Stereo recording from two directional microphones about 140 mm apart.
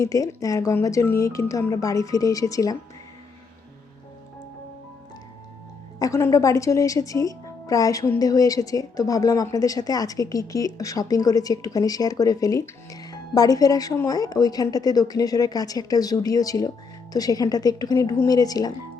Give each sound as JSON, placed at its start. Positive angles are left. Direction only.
{"t": 0.0, "sound": "a woman's voice", "side_deg": 25}
{"t": 6.0, "sound": "a woman's voice", "side_deg": 20}